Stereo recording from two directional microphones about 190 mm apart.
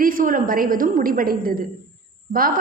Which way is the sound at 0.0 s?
45° right (ahead or behind).